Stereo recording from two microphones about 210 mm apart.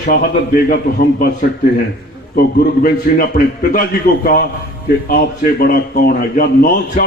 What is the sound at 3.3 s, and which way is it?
A man's voice, 40° left (ahead or behind).